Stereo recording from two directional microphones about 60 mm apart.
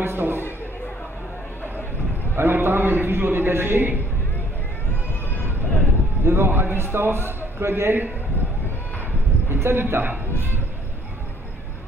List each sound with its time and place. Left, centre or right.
0.0 s a sound: right
2.3 s a man's voice: right
6.2 s a man's voice: right
9.5 s a man's voice: right